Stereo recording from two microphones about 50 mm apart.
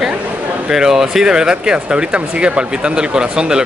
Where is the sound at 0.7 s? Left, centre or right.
Centre.